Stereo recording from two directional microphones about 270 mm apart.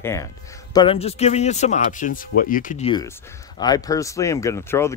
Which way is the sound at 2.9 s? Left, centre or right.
Centre.